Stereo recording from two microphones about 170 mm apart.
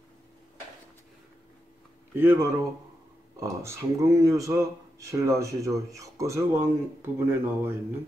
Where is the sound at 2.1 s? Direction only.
15° right (ahead or behind).